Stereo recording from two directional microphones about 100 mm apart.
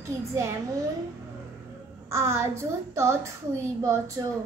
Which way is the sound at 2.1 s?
25° right (ahead or behind).